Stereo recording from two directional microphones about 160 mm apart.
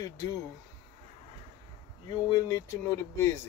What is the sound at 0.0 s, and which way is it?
Speech, 25° left (ahead or behind).